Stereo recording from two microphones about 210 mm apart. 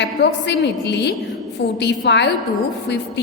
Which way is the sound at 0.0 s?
55° left (ahead or behind).